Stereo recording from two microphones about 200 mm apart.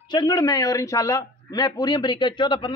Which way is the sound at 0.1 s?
20° left (ahead or behind).